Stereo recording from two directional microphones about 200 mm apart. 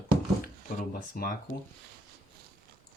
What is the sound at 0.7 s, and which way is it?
Speech, 45° left (ahead or behind).